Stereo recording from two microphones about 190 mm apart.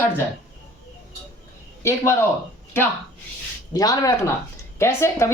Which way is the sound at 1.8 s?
15° left (ahead or behind).